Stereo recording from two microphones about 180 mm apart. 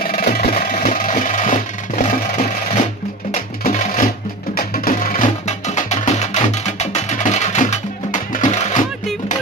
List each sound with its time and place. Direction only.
0.0 s music: 55° left (ahead or behind)
3.6 s a sound: 45° left (ahead or behind)
4.6 s music: 50° left (ahead or behind)